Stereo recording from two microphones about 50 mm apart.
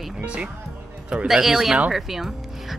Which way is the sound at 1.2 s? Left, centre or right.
Centre.